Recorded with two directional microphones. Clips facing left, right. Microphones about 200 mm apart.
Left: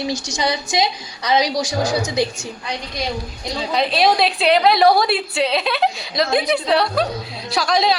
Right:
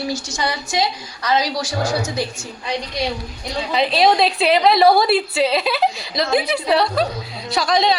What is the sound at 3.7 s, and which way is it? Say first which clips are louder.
A woman's voice: right 1 dB; centre (ahead or behind).